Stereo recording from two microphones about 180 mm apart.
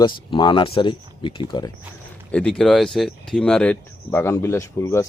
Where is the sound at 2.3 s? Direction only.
5° left (ahead or behind).